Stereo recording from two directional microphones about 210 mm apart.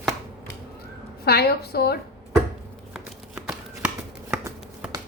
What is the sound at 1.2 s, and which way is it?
Speech, 50° left (ahead or behind).